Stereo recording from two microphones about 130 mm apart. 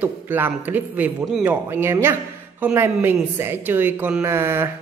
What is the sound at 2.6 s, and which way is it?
A woman's voice, 10° right (ahead or behind).